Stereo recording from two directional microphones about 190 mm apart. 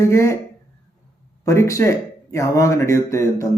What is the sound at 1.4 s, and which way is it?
Speech, 15° left (ahead or behind).